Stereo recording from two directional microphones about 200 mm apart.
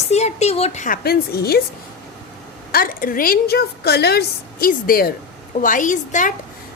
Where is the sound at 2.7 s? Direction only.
50° left (ahead or behind).